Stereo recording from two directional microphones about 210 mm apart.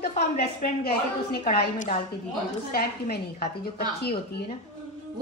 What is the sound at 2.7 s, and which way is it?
Speech, 50° left (ahead or behind).